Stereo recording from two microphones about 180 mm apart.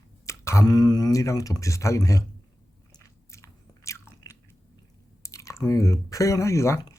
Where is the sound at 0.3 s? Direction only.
15° left (ahead or behind).